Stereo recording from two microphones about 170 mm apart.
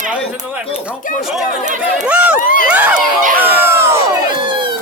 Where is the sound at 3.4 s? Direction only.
10° right (ahead or behind).